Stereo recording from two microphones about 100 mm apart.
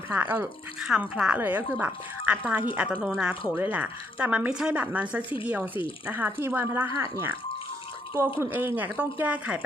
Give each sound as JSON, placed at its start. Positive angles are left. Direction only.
{"t": 0.1, "sound": "speech", "side_deg": -20}
{"t": 1.1, "sound": "speech", "side_deg": -10}
{"t": 1.4, "sound": "speech", "side_deg": -20}
{"t": 6.9, "sound": "speech", "side_deg": -30}
{"t": 8.4, "sound": "speech", "side_deg": -20}